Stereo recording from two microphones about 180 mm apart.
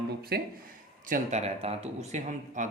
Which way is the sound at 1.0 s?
45° right (ahead or behind).